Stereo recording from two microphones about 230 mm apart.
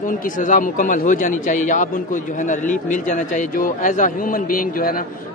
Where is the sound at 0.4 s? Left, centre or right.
Left.